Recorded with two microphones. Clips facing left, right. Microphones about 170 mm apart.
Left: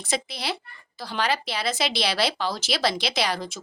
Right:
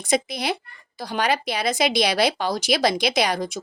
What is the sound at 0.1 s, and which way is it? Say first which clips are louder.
Speech: right 6 dB; 15° right (ahead or behind).